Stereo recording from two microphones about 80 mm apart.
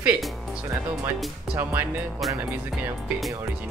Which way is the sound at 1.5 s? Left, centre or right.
Right.